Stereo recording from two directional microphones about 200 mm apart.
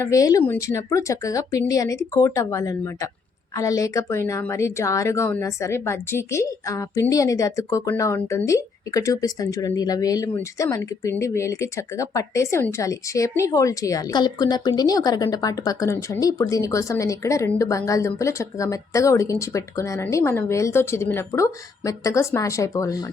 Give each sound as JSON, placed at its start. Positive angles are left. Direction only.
{"t": 0.0, "sound": "speech", "side_deg": 15}